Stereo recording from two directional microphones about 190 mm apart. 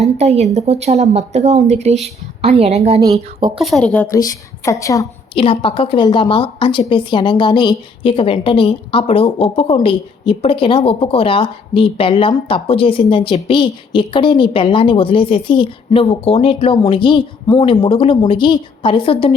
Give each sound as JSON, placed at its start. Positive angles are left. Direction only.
{"t": 0.0, "sound": "speech", "side_deg": -35}
{"t": 3.0, "sound": "speech", "side_deg": -20}
{"t": 3.6, "sound": "a woman's voice", "side_deg": 0}
{"t": 5.4, "sound": "a woman's voice", "side_deg": 25}